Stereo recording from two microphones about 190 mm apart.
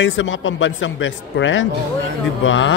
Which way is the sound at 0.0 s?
90° left.